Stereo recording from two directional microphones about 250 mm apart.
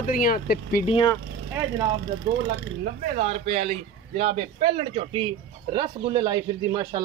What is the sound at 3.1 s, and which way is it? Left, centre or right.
A man's voice, right.